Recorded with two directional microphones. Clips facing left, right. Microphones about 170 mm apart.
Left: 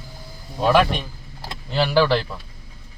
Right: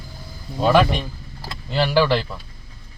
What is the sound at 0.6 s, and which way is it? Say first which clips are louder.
Speech: right 1 dB; centre (ahead or behind).